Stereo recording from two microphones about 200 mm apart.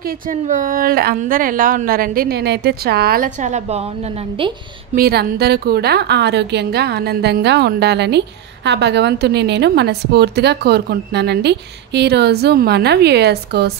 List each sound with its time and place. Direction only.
0.3 s a woman's voice: 40° right (ahead or behind)
4.9 s a woman's voice: 50° right (ahead or behind)